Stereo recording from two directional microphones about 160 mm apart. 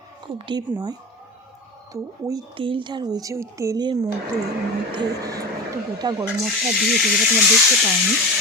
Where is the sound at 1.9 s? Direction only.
20° right (ahead or behind).